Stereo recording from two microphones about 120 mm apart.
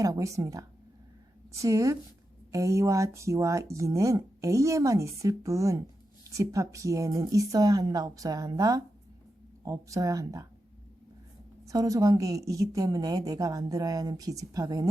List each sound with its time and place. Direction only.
0.0 s speech: 30° right (ahead or behind)
11.7 s speech: 30° right (ahead or behind)